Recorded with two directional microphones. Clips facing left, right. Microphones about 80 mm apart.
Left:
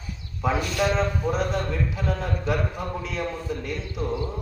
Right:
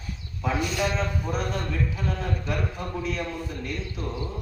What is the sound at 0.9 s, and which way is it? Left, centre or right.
Speech, left.